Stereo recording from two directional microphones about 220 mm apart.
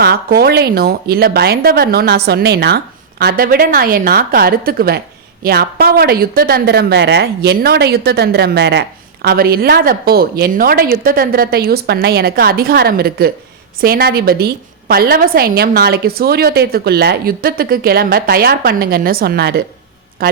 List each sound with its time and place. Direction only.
0.0 s a woman's voice: 45° right (ahead or behind)